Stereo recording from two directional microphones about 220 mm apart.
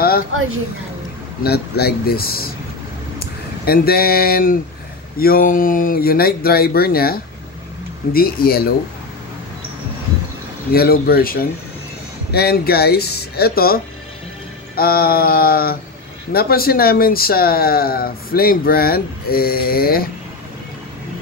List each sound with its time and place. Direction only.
0.3 s speech: 65° right (ahead or behind)
1.4 s speech: 45° left (ahead or behind)
10.7 s speech: 45° left (ahead or behind)
14.8 s speech: 45° left (ahead or behind)